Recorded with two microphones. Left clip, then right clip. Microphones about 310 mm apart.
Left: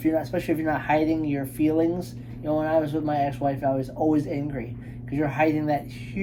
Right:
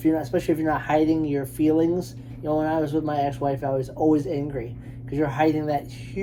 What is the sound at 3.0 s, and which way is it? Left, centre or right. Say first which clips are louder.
Speech: even; centre.